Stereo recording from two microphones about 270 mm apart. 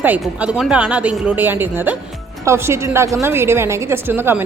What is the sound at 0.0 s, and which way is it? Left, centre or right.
A woman's voice, centre.